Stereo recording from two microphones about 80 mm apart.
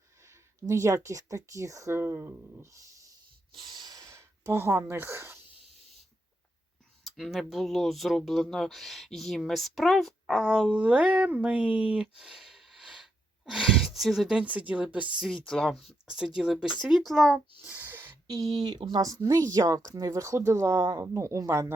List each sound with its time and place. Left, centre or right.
0.2 s speech: right
3.6 s snort: right
4.0 s speech: right
7.0 s speech: centre
10.4 s speech: centre
14.4 s speech: centre
15.3 s speech: centre
16.0 s speech: centre
17.6 s a sound: right
18.3 s speech: right
19.0 s speech: right